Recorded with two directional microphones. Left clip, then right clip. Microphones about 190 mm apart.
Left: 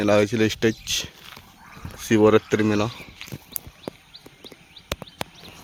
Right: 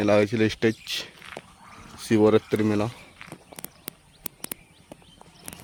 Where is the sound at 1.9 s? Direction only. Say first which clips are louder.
Left 3 dB; centre (ahead or behind).